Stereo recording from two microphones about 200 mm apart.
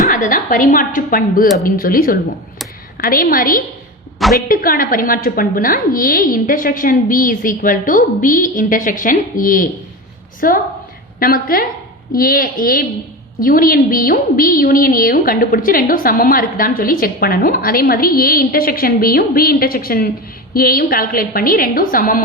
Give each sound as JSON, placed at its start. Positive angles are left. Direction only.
{"t": 0.0, "sound": "a woman's voice", "side_deg": 40}